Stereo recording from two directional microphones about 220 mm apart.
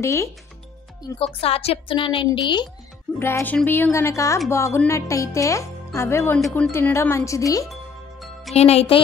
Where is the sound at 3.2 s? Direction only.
10° left (ahead or behind).